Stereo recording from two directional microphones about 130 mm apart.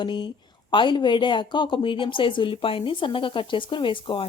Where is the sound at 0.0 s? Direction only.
40° left (ahead or behind).